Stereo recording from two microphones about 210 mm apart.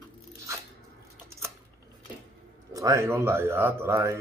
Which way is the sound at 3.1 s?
10° right (ahead or behind).